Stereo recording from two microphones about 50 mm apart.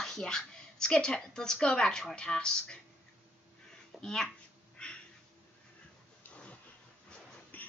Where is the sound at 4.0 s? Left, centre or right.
Centre.